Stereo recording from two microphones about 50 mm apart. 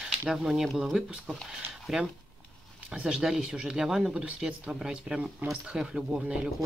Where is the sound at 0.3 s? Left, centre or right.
Centre.